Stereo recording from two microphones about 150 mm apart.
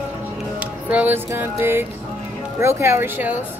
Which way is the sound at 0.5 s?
10° right (ahead or behind).